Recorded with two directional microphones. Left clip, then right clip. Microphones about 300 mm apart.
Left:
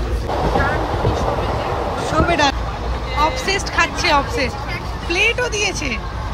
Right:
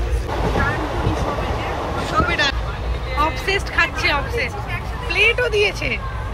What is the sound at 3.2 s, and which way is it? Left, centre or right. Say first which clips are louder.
Music: left 2 dB; centre.